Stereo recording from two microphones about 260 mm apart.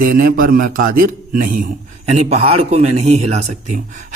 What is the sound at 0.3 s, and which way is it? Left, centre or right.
A man's voice, right.